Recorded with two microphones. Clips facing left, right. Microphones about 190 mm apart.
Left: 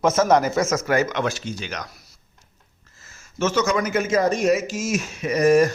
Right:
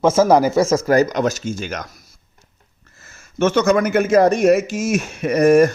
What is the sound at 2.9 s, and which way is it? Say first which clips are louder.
Speech: right 6 dB; 60° right (ahead or behind).